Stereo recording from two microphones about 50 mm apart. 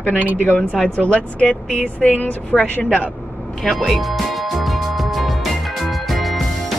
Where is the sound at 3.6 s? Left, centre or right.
Centre.